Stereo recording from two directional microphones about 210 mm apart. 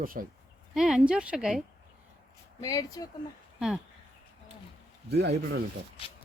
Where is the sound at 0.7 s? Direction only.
Centre (ahead or behind).